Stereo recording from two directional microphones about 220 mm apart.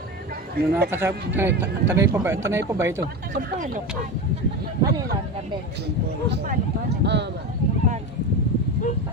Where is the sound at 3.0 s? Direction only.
45° right (ahead or behind).